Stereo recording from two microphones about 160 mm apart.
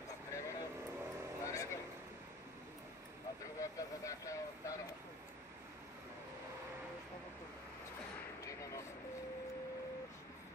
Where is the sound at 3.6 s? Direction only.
20° left (ahead or behind).